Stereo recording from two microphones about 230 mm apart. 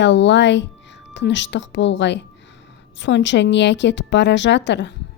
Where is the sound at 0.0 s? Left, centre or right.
Left.